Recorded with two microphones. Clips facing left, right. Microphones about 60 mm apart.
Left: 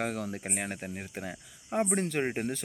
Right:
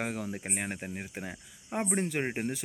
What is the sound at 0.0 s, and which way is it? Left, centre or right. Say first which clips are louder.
Speech: left 1 dB; centre.